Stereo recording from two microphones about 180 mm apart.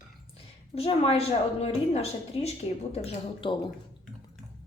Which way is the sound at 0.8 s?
35° left (ahead or behind).